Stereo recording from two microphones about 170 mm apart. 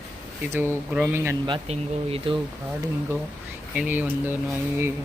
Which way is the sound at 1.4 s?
30° right (ahead or behind).